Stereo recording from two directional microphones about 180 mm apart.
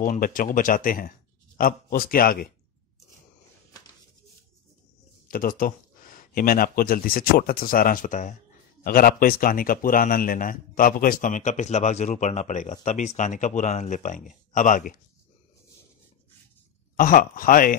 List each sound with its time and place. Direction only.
0.0 s speech: 50° left (ahead or behind)
5.3 s speech: 50° left (ahead or behind)
16.9 s speech: 50° left (ahead or behind)